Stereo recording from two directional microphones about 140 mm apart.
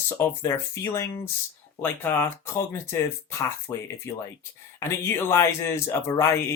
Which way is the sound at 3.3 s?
20° left (ahead or behind).